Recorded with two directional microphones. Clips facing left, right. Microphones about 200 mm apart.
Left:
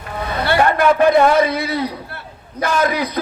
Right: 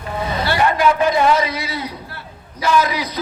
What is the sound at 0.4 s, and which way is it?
A man's voice, 55° left (ahead or behind).